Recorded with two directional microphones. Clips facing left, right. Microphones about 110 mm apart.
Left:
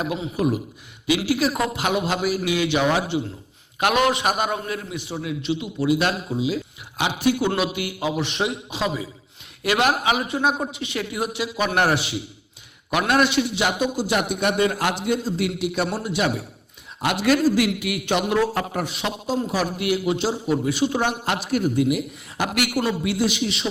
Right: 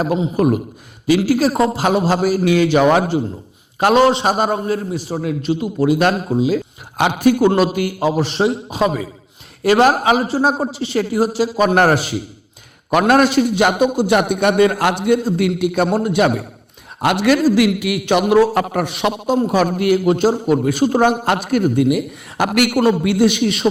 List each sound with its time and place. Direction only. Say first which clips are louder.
0.3 s a man's voice: right 7 dB; 50° right (ahead or behind)
3.8 s a man's voice: right 7 dB; 35° right (ahead or behind)
8.8 s a man's voice: right 8 dB; 50° right (ahead or behind)
9.6 s a man's voice: right 8 dB; 40° right (ahead or behind); by 19.4 s 65° right (ahead or behind)
19.4 s a man's voice: right 9 dB; 55° right (ahead or behind)